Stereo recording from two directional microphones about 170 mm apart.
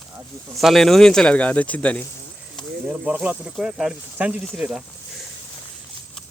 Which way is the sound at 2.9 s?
10° right (ahead or behind).